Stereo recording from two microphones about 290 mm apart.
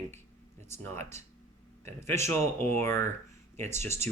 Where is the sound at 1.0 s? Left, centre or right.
Right.